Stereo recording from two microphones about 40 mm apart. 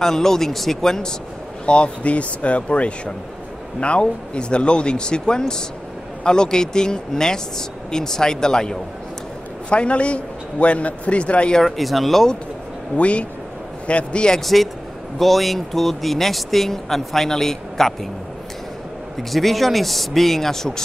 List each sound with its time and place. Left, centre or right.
0.0 s speech: centre
1.7 s a man's voice: left
9.7 s a man's voice: left
11.6 s speech: centre
12.9 s a man's voice: left
14.3 s speech: centre
19.3 s speech: centre